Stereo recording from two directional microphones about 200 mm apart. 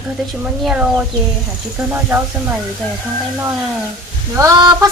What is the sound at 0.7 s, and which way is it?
Speech, 5° right (ahead or behind).